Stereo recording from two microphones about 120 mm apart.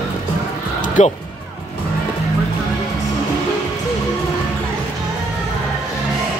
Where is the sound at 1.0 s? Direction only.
75° left (ahead or behind).